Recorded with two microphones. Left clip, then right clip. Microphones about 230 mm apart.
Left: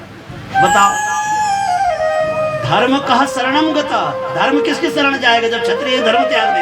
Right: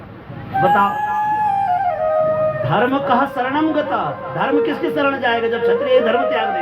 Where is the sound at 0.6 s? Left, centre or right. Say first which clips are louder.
Left 4 dB; left.